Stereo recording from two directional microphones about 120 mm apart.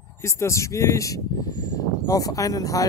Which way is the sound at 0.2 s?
25° left (ahead or behind).